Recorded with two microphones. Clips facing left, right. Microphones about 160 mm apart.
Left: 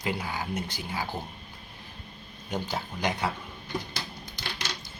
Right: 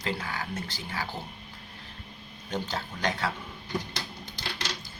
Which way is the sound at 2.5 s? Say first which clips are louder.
Left 1 dB; 10° left (ahead or behind).